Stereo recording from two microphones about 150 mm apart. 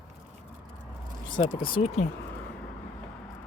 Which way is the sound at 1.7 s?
40° left (ahead or behind).